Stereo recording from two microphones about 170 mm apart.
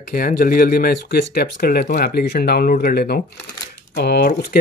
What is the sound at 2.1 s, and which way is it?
Speech, 70° left (ahead or behind).